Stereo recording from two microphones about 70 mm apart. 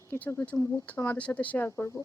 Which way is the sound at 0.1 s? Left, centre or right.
Left.